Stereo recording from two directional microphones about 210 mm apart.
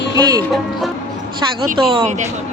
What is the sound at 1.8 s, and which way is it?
Speech, 25° right (ahead or behind).